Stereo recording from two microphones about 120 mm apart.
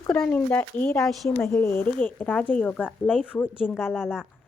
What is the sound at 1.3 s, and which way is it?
Speech, 20° left (ahead or behind).